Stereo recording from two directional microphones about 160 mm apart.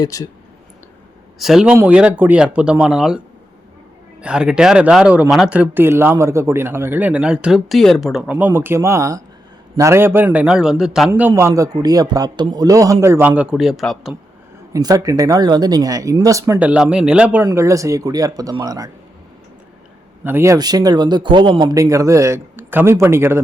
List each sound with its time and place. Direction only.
0.0 s speech: 20° left (ahead or behind)
1.4 s speech: 5° right (ahead or behind)
4.2 s speech: 5° right (ahead or behind)
11.1 s speech: 15° right (ahead or behind); by 14.2 s centre (ahead or behind)
14.7 s speech: 25° right (ahead or behind)
16.6 s speech: 5° right (ahead or behind); by 18.9 s 20° right (ahead or behind)
20.2 s speech: 15° right (ahead or behind)